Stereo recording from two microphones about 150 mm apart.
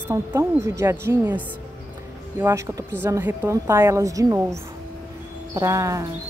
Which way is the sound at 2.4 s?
20° right (ahead or behind).